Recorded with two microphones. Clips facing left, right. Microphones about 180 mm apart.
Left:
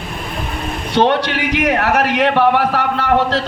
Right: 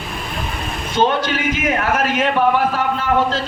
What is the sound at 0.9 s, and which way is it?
A man's voice, 75° left (ahead or behind).